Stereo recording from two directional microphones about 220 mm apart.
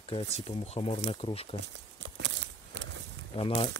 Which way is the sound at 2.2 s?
55° right (ahead or behind).